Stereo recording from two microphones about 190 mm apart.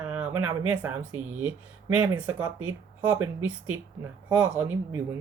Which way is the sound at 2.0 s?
20° right (ahead or behind).